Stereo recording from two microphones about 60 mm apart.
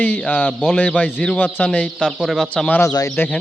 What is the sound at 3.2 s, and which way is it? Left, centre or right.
Speech, left.